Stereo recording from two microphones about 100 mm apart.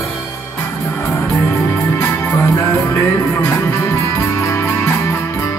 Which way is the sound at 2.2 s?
25° left (ahead or behind).